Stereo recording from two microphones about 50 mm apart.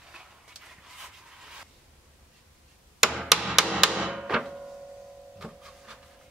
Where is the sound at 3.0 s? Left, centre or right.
Centre.